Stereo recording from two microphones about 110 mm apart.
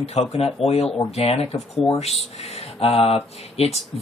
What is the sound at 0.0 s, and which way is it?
Speech, 70° left (ahead or behind).